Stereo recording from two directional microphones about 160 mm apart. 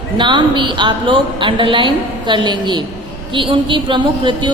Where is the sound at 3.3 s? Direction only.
30° right (ahead or behind).